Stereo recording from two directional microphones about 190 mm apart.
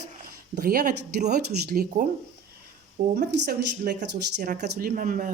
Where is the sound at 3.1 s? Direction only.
60° right (ahead or behind).